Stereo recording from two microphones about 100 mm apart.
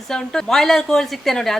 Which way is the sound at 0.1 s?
5° left (ahead or behind).